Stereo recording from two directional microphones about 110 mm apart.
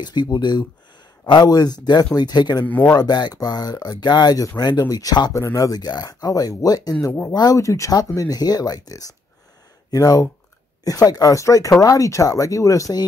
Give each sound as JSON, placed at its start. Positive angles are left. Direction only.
{"t": 0.0, "sound": "speech", "side_deg": 40}
{"t": 2.6, "sound": "speech", "side_deg": 15}
{"t": 2.9, "sound": "speech", "side_deg": 40}
{"t": 7.1, "sound": "speech", "side_deg": 20}
{"t": 7.3, "sound": "speech", "side_deg": 35}